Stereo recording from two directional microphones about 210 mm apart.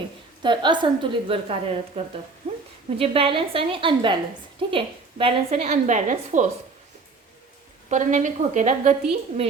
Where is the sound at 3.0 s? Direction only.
25° right (ahead or behind).